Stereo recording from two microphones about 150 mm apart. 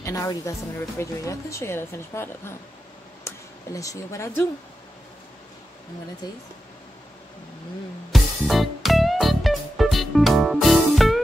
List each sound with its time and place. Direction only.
0.0 s speech: 20° left (ahead or behind)
8.1 s music: centre (ahead or behind)